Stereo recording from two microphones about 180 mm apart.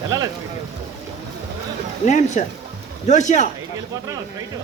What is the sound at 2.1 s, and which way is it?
A man's voice, 40° left (ahead or behind).